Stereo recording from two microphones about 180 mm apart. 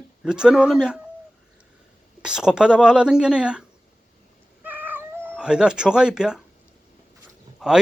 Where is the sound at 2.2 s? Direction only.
5° right (ahead or behind).